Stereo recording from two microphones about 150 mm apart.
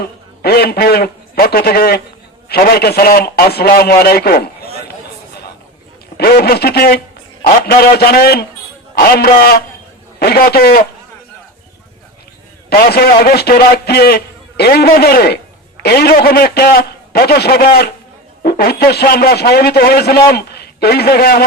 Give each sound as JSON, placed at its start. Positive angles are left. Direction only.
{"t": 0.4, "sound": "a man's voice", "side_deg": 90}
{"t": 6.1, "sound": "a man's voice", "side_deg": 90}
{"t": 12.7, "sound": "a man's voice", "side_deg": 90}